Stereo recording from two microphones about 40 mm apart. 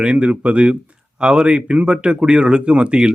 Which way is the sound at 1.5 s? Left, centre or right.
Right.